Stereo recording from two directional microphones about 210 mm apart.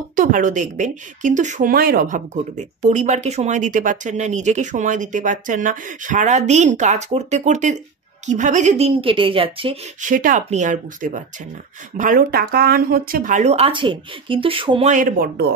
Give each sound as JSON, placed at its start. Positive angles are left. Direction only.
{"t": 0.1, "sound": "a woman's voice", "side_deg": -40}
{"t": 10.0, "sound": "speech", "side_deg": -40}